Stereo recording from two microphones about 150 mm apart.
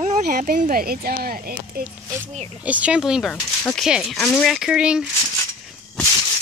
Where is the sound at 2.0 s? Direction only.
15° right (ahead or behind).